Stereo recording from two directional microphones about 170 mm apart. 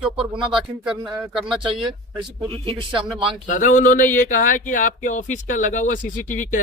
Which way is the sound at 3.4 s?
50° left (ahead or behind).